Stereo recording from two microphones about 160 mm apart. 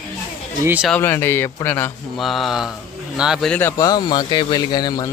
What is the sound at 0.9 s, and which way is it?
A man's voice, 10° left (ahead or behind).